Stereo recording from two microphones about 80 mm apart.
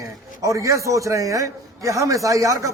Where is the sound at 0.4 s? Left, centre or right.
Right.